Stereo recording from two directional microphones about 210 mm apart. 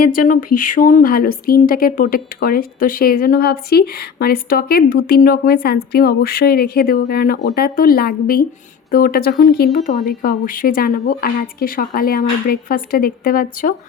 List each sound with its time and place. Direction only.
0.0 s speech: 40° left (ahead or behind)